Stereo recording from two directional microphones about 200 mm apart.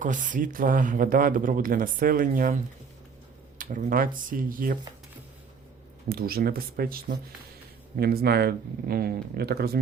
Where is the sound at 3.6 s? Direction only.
40° right (ahead or behind).